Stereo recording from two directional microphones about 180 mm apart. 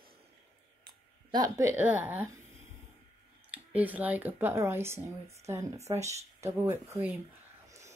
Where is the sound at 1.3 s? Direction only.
20° right (ahead or behind).